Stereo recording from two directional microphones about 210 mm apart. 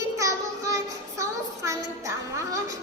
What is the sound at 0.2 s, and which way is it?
Child singing, 15° right (ahead or behind).